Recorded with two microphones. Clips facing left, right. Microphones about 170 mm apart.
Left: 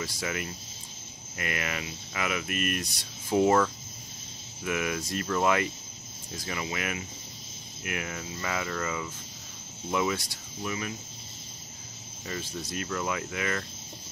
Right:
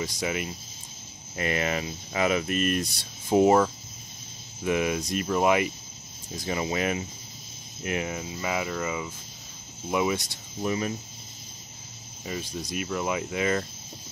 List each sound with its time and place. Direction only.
0.0 s speech: 20° right (ahead or behind)
12.3 s speech: 15° right (ahead or behind)